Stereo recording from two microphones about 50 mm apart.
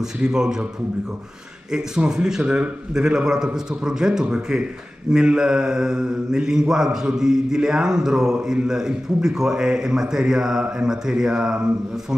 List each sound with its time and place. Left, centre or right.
0.2 s mantra: centre
2.0 s mantra: centre
2.4 s mantra: right